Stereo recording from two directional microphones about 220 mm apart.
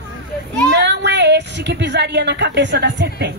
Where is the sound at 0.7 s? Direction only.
50° right (ahead or behind).